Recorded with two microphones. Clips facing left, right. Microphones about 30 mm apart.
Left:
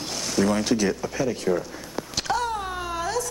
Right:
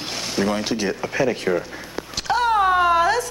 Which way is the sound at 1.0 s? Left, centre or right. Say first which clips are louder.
Right 5 dB; right.